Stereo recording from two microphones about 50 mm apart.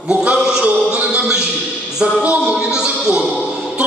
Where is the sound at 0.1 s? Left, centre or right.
Centre.